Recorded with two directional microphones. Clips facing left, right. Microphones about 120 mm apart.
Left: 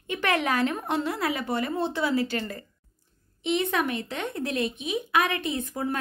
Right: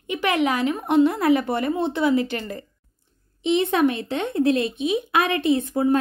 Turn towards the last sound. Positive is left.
turn(degrees=-25)  # may be behind; listen again after turning